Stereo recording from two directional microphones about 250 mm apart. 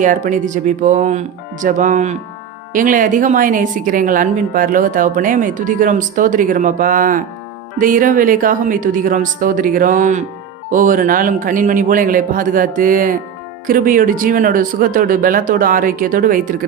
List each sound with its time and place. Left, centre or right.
0.0 s a woman's voice: right